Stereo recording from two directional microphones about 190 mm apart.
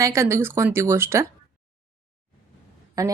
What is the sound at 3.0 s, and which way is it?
Speech, 20° right (ahead or behind).